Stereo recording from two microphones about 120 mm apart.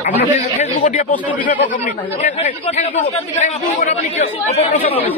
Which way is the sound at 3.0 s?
80° left.